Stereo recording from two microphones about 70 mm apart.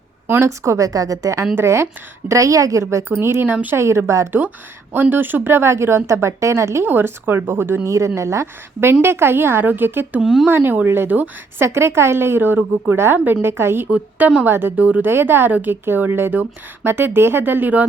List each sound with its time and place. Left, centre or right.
0.3 s a woman's voice: right
3.5 s speech: right
3.8 s a woman's voice: right
4.3 s a woman's voice: right
6.8 s a woman's voice: right
7.9 s a woman's voice: right
10.2 s speech: centre
10.4 s a woman's voice: right
13.9 s speech: centre
14.4 s a woman's voice: right